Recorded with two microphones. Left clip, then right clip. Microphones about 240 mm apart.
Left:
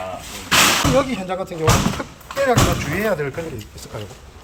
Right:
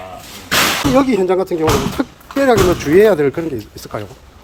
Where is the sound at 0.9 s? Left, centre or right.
Right.